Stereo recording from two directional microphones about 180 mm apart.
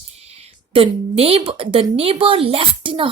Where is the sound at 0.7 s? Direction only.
35° right (ahead or behind).